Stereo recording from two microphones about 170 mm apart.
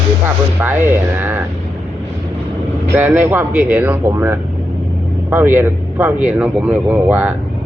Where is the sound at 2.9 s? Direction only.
10° right (ahead or behind).